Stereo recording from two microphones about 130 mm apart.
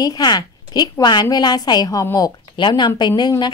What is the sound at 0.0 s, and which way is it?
A woman's voice, 30° left (ahead or behind).